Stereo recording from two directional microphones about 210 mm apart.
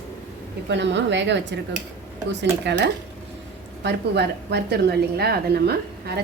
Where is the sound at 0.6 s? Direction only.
55° right (ahead or behind).